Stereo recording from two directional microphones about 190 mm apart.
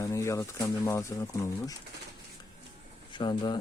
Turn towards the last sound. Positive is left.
turn(degrees=25)  # may be behind; listen again after turning